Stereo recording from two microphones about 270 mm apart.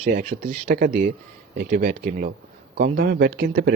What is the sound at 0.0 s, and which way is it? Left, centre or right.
A man's voice, right.